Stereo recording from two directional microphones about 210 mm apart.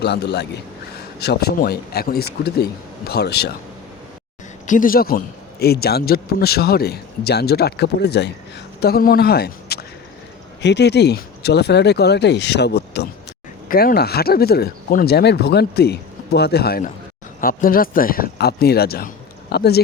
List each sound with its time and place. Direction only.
0.0 s a man's voice: 50° left (ahead or behind)
4.6 s a man's voice: 40° left (ahead or behind)